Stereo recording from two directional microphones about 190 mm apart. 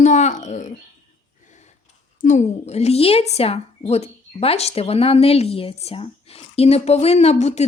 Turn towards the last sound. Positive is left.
turn(degrees=35)  # may be behind; listen again after turning